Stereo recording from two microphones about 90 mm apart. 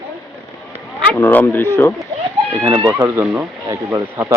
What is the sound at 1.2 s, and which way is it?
Speech, 25° left (ahead or behind).